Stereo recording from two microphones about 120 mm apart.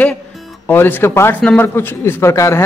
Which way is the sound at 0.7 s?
15° left (ahead or behind).